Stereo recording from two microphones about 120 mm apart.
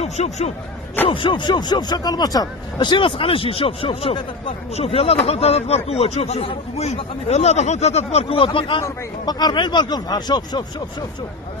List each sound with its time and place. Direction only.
0.0 s speech: 65° left (ahead or behind)
1.0 s speech: 45° left (ahead or behind)
8.5 s speech: 45° left (ahead or behind)
8.8 s speech: 35° left (ahead or behind)